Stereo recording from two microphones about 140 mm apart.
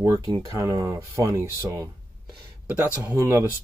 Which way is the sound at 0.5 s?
25° right (ahead or behind).